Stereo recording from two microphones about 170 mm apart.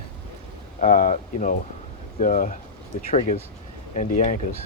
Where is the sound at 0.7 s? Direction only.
50° left (ahead or behind).